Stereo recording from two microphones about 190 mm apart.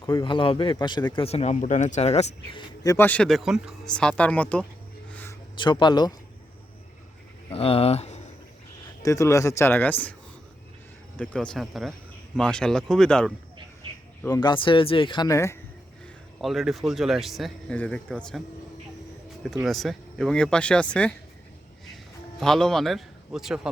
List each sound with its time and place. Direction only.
0.0 s speech: 25° left (ahead or behind); by 4.6 s 5° left (ahead or behind)
5.1 s a sound: 10° left (ahead or behind)
5.5 s speech: 25° left (ahead or behind)
7.5 s speech: 30° left (ahead or behind)
9.0 s speech: 15° left (ahead or behind)
11.2 s speech: 10° left (ahead or behind)
14.3 s speech: 20° left (ahead or behind)
16.4 s speech: centre (ahead or behind)
19.6 s speech: centre (ahead or behind)
22.4 s a man's voice: centre (ahead or behind)